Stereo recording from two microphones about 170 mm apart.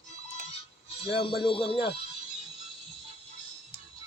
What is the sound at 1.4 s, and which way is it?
Speech, 30° left (ahead or behind).